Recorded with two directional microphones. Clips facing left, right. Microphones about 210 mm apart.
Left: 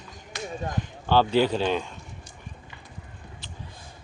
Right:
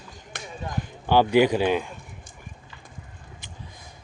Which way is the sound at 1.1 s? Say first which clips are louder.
Right 3 dB; 15° right (ahead or behind).